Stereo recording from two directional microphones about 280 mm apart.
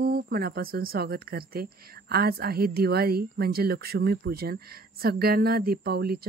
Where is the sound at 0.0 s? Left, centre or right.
Right.